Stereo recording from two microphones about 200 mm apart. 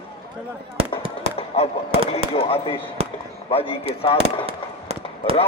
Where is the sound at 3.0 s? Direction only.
30° right (ahead or behind).